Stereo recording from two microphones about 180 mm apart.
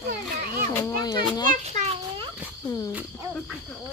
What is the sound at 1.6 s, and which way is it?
Children playing, 35° right (ahead or behind).